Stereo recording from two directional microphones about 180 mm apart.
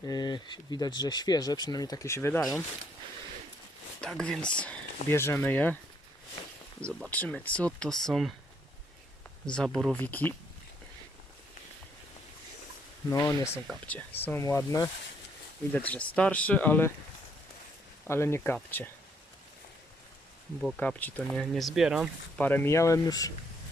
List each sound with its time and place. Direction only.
0.0 s speech: 20° left (ahead or behind)
4.0 s speech: 5° left (ahead or behind)
6.8 s speech: 5° left (ahead or behind)
9.5 s speech: 5° left (ahead or behind)
13.1 s speech: 15° left (ahead or behind)
15.7 s speech: 10° left (ahead or behind)
18.1 s speech: 15° left (ahead or behind)
20.6 s speech: 5° left (ahead or behind)
22.4 s speech: 10° left (ahead or behind)